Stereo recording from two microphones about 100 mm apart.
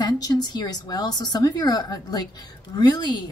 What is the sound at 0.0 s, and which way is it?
A woman's voice, 45° left (ahead or behind).